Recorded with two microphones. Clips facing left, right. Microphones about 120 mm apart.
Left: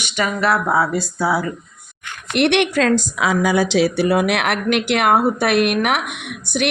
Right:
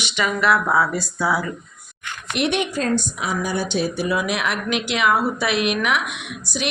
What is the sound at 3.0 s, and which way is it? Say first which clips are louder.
A woman's voice: left 7 dB; 90° left.